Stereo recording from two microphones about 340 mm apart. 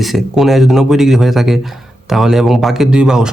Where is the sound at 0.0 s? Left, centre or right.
Centre.